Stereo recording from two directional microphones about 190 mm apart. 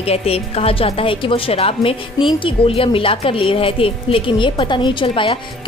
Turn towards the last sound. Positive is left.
turn(degrees=25)  # may be behind; listen again after turning